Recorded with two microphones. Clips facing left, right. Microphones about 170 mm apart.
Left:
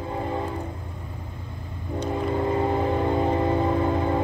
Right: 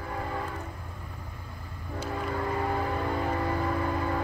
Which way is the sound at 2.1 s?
25° left (ahead or behind).